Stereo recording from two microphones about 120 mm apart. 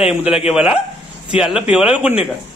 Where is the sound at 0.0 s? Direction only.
10° right (ahead or behind).